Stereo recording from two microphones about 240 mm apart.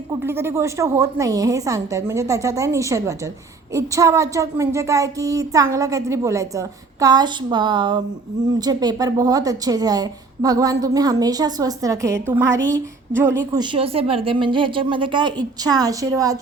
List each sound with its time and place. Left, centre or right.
0.1 s a woman's voice: centre